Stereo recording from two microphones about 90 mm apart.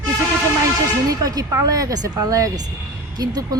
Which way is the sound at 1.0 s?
40° right (ahead or behind).